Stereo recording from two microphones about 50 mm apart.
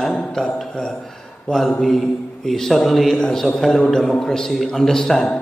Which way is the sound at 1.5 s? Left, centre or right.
Centre.